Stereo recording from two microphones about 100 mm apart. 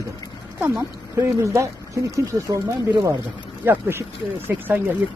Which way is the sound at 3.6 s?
20° right (ahead or behind).